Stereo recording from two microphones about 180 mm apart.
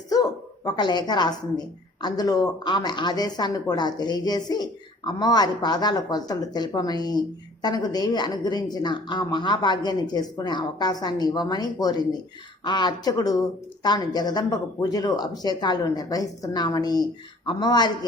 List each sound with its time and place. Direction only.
0.1 s speech: 20° left (ahead or behind)